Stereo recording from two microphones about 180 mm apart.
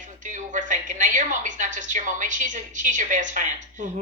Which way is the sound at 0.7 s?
45° right (ahead or behind).